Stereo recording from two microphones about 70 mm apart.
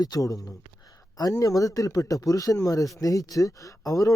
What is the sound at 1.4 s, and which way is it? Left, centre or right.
Speech, left.